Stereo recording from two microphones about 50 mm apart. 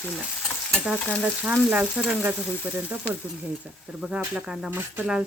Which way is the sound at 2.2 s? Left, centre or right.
Right.